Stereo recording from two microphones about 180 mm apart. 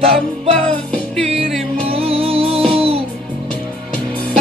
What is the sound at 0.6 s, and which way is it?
Music, centre (ahead or behind).